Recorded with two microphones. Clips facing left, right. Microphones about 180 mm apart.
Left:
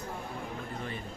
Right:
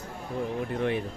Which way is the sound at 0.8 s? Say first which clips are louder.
Right 12 dB; 75° right (ahead or behind).